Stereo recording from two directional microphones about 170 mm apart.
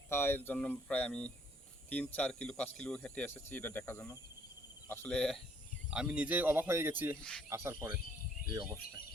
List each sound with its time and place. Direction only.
0.1 s speech: 15° left (ahead or behind)
4.9 s speech: 5° left (ahead or behind)
5.9 s speech: 5° right (ahead or behind)
7.2 s speech: 5° left (ahead or behind)
7.5 s speech: 15° right (ahead or behind)